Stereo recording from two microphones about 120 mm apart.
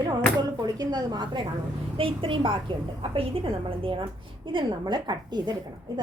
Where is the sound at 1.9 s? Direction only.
50° right (ahead or behind).